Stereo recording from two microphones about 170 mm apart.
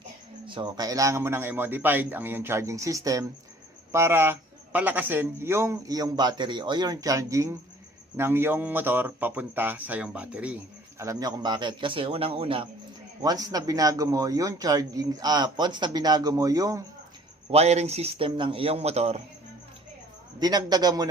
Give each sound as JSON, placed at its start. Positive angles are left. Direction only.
{"t": 0.4, "sound": "speech", "side_deg": -30}
{"t": 13.2, "sound": "speech", "side_deg": -20}
{"t": 17.5, "sound": "a man's voice", "side_deg": -40}
{"t": 20.4, "sound": "speech", "side_deg": -25}